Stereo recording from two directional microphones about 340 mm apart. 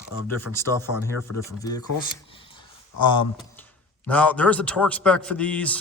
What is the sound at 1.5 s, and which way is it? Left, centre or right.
Speech, centre.